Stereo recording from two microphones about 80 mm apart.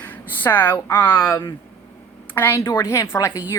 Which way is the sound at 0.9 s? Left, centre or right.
Left.